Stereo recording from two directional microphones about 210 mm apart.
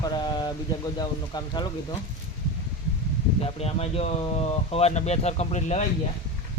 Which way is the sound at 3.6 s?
30° left (ahead or behind).